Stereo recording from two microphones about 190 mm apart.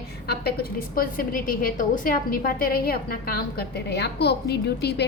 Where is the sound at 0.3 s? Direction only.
55° left (ahead or behind).